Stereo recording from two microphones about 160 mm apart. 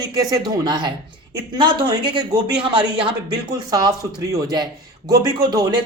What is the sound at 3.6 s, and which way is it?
A man's voice, 25° right (ahead or behind).